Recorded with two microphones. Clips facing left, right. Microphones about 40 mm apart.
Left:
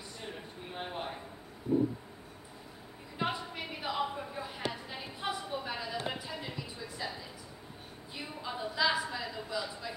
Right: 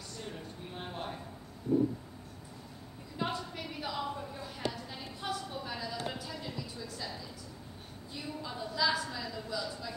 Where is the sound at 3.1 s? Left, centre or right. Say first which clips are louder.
Left 1 dB; left.